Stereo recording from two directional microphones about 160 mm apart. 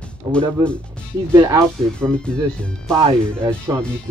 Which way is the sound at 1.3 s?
20° right (ahead or behind).